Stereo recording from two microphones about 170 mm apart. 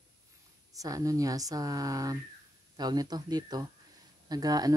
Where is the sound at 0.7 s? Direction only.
20° right (ahead or behind).